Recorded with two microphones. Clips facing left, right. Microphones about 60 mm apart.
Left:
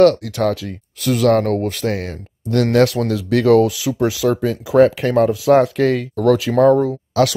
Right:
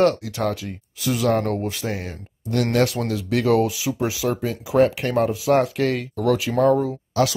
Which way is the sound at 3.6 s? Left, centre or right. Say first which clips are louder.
Left 5 dB; right.